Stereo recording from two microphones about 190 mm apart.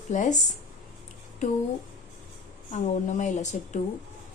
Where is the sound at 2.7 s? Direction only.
40° left (ahead or behind).